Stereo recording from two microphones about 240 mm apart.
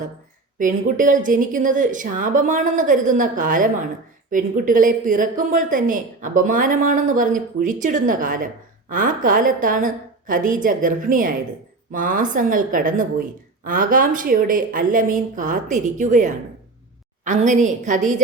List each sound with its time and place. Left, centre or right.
0.6 s speech: right